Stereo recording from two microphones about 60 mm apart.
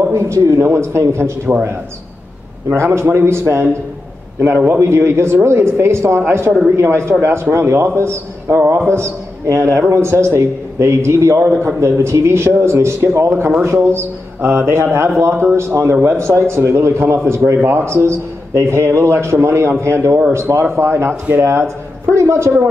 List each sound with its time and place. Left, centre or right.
0.0 s a man's voice: right